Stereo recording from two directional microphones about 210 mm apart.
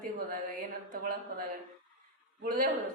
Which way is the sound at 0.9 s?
40° right (ahead or behind).